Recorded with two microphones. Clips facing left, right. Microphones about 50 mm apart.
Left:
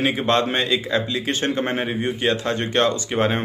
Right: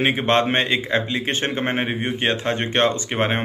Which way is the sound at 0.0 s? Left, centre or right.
Right.